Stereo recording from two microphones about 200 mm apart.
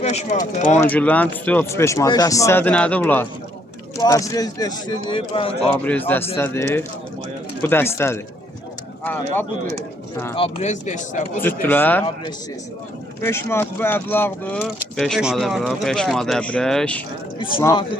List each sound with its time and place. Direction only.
0.0 s speech: 35° left (ahead or behind)
0.8 s speech: 10° left (ahead or behind); by 5.7 s 30° left (ahead or behind)
6.3 s speech: 10° left (ahead or behind)
10.3 s speech: 30° left (ahead or behind)
11.6 s speech: 10° left (ahead or behind)
13.2 s speech: 10° left (ahead or behind)
17.6 s speech: 15° left (ahead or behind)